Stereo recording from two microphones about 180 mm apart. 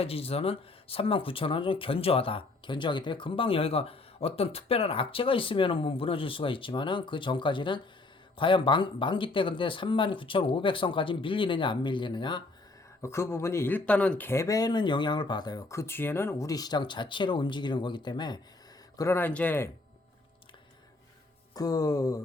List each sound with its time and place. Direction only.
0.0 s speech: 35° left (ahead or behind)
13.0 s speech: 15° left (ahead or behind)
18.9 s speech: 15° left (ahead or behind)
21.5 s speech: 20° left (ahead or behind)